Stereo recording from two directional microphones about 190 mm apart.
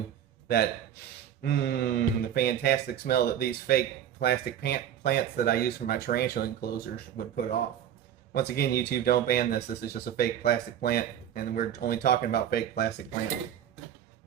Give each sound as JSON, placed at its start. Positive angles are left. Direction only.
{"t": 0.4, "sound": "speech", "side_deg": 55}